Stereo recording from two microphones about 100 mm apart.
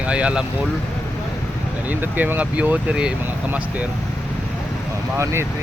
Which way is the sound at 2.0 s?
20° right (ahead or behind).